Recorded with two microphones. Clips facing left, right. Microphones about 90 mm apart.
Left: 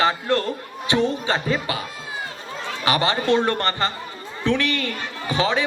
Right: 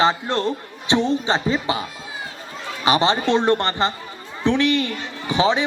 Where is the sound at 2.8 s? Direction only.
20° right (ahead or behind).